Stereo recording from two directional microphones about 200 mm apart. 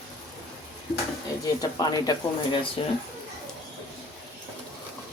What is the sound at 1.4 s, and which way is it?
Speech, 20° left (ahead or behind).